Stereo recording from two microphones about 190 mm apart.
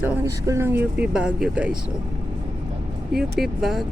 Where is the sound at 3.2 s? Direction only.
Centre (ahead or behind).